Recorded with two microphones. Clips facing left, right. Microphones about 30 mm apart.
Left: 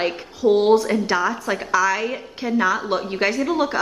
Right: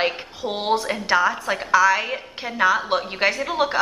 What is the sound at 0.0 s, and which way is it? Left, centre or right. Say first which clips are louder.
A woman's voice: left 4 dB; centre.